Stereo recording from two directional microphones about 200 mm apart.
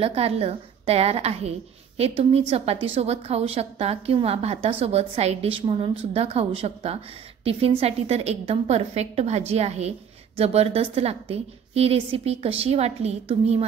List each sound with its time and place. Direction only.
0.0 s a woman's voice: 30° right (ahead or behind)